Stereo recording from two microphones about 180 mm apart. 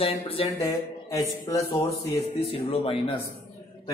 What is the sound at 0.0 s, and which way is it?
Speech, 30° left (ahead or behind).